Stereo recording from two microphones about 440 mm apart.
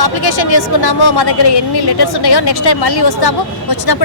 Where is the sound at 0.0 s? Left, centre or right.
Left.